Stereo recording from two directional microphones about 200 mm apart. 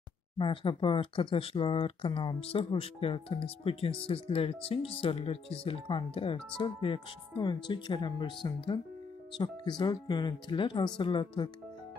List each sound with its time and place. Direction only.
0.4 s speech: 25° left (ahead or behind)